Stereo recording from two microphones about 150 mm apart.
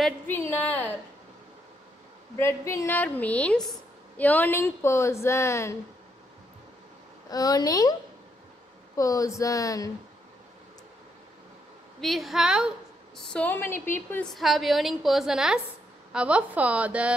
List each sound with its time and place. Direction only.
0.3 s a woman's voice: 15° left (ahead or behind)
2.3 s a woman's voice: 20° left (ahead or behind)
7.2 s speech: 25° left (ahead or behind)
8.9 s speech: 25° left (ahead or behind)
12.0 s a woman's voice: centre (ahead or behind)
13.3 s a woman's voice: 10° left (ahead or behind)
14.3 s a woman's voice: centre (ahead or behind)